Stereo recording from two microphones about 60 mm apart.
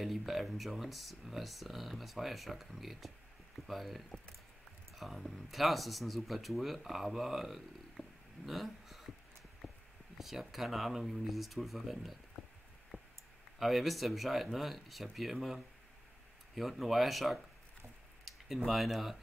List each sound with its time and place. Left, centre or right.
0.0 s speech: centre
9.6 s a sound: centre
10.1 s speech: centre
12.9 s clicking: right
13.6 s speech: centre